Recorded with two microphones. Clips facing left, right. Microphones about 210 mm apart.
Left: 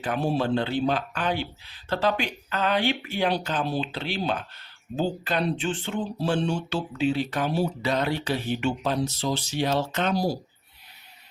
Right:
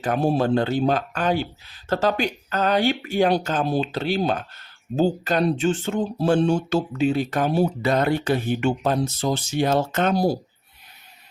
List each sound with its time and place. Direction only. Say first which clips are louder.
0.0 s speech: right 5 dB; 45° right (ahead or behind)